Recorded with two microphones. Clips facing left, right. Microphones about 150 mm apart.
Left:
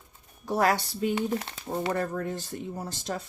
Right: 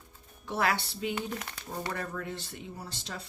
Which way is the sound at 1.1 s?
25° left (ahead or behind).